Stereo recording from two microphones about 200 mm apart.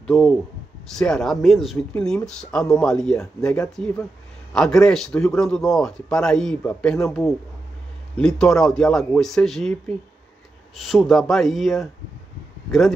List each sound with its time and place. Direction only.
0.0 s speech: centre (ahead or behind)